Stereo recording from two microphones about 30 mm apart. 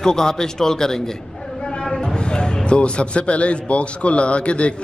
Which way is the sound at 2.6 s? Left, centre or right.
Left.